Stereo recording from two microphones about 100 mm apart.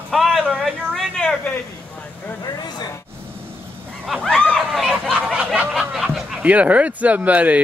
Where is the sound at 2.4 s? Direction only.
40° left (ahead or behind).